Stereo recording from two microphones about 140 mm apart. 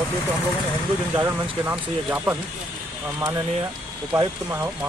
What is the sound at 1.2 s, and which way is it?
Speech, 15° right (ahead or behind).